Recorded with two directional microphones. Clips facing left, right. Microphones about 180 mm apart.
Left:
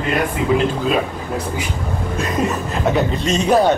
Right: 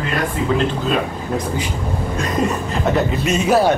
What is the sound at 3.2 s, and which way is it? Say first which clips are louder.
Speech: left 1 dB; 5° right (ahead or behind).